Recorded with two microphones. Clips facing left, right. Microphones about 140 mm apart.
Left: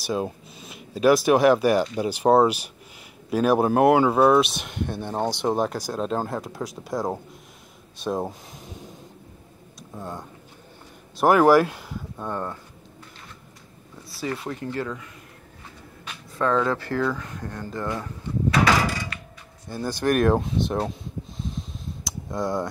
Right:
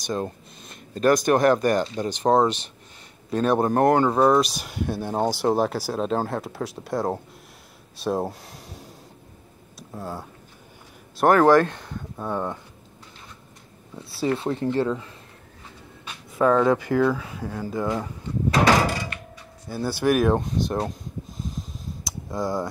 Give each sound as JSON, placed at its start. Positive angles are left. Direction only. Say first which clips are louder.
{"t": 0.0, "sound": "speech", "louder": "left 1 dB", "side_deg": 5}
{"t": 8.0, "sound": "a sound", "louder": "right 2 dB", "side_deg": -5}
{"t": 11.1, "sound": "speech", "louder": "even", "side_deg": 5}
{"t": 12.2, "sound": "speech", "louder": "right 3 dB", "side_deg": -10}
{"t": 14.4, "sound": "speech", "louder": "right 6 dB", "side_deg": -30}
{"t": 16.3, "sound": "speech", "louder": "right 4 dB", "side_deg": -10}
{"t": 19.7, "sound": "speech", "louder": "right 1 dB", "side_deg": -5}